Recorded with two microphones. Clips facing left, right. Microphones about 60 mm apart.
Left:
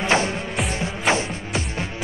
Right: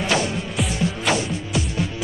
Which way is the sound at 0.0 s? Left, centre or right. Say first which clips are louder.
Left 1 dB; left.